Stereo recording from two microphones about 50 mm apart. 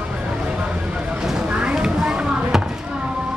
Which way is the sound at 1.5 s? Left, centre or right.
Right.